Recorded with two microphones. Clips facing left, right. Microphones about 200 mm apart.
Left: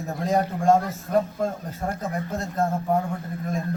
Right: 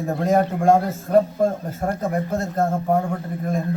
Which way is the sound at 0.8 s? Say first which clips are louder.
Right 6 dB; 35° right (ahead or behind).